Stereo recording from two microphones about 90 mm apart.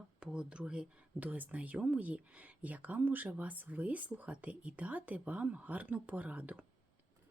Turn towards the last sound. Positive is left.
turn(degrees=-15)  # may be behind; listen again after turning